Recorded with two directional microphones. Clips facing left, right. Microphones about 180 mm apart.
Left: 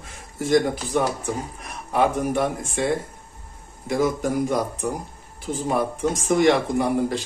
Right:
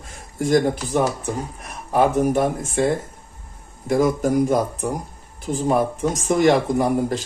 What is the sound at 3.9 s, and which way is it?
Speech, 45° right (ahead or behind).